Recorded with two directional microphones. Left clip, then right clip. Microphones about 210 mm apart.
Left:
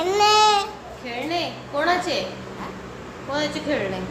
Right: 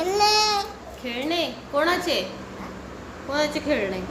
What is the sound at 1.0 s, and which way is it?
A woman's voice, 30° right (ahead or behind).